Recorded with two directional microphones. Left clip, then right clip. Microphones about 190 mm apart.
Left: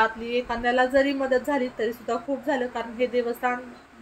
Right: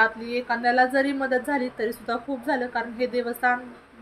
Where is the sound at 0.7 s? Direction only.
5° right (ahead or behind).